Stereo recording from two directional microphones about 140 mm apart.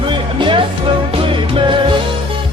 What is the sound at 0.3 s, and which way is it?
Music, 35° right (ahead or behind).